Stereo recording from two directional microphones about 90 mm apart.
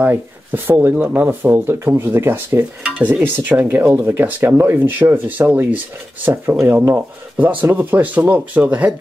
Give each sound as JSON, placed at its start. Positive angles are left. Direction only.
{"t": 0.0, "sound": "speech", "side_deg": -25}
{"t": 2.8, "sound": "stir", "side_deg": -15}
{"t": 3.9, "sound": "speech", "side_deg": -25}
{"t": 6.2, "sound": "speech", "side_deg": -30}